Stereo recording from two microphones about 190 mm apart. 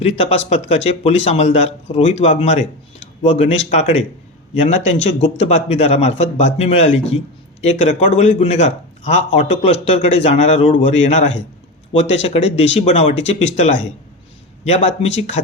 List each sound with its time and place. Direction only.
0.0 s speech: 30° left (ahead or behind)